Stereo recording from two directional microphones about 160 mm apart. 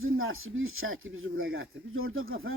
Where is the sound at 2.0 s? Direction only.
65° right (ahead or behind).